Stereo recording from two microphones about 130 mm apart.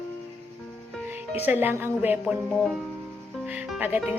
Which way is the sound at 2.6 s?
5° left (ahead or behind).